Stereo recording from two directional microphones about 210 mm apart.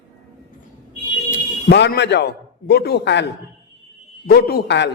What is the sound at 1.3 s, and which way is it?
A man's voice, 55° left (ahead or behind).